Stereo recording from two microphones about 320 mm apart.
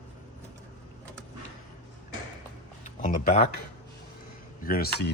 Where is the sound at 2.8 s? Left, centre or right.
Left.